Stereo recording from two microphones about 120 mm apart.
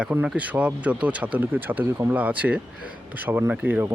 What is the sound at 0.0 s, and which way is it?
Speech, 15° right (ahead or behind).